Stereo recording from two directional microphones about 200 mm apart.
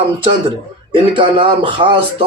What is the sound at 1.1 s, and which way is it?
Speech, 25° right (ahead or behind).